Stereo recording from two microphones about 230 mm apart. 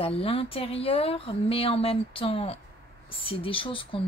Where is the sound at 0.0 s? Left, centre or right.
Left.